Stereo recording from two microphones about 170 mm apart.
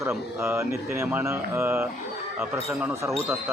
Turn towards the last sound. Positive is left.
turn(degrees=-15)  # may be behind; listen again after turning